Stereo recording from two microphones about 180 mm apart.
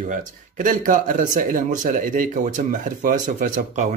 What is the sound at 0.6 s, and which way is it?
Speech, 45° right (ahead or behind).